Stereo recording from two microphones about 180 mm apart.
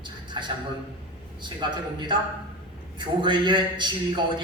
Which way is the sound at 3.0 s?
25° right (ahead or behind).